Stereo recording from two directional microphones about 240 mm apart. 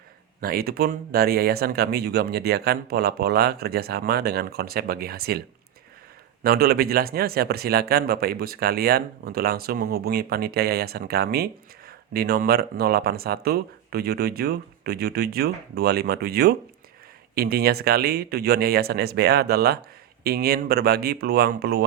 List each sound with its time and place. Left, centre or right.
0.4 s speech: right
6.4 s speech: right